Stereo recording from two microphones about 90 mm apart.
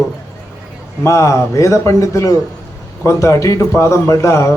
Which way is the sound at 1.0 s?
35° left (ahead or behind).